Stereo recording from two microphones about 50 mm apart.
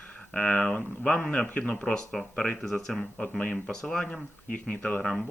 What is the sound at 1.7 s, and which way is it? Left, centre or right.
Speech, centre.